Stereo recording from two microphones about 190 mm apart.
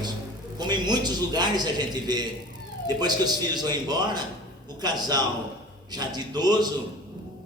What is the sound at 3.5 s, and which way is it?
A man's voice, 20° right (ahead or behind).